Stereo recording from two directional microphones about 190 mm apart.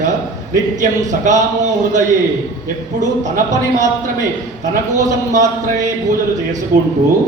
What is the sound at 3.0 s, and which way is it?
A man's voice, 40° right (ahead or behind).